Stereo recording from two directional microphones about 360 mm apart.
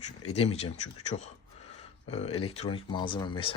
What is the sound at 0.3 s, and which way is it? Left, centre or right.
Speech, centre.